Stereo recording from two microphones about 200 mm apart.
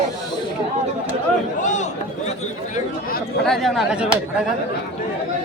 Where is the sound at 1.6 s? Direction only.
35° left (ahead or behind).